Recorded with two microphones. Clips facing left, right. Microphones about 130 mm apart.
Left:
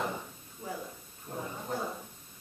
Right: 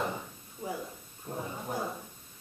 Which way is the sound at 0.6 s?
15° right (ahead or behind).